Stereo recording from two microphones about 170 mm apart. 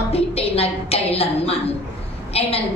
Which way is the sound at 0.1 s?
35° left (ahead or behind).